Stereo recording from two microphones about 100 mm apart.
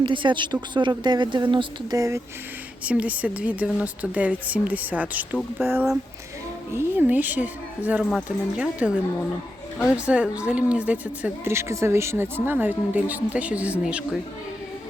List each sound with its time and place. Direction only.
0.0 s speech: 55° right (ahead or behind)
2.0 s speech: 30° right (ahead or behind)
2.8 s speech: 15° right (ahead or behind)
10.1 s speech: 10° right (ahead or behind)
11.5 s speech: 30° right (ahead or behind); by 14.2 s 10° right (ahead or behind)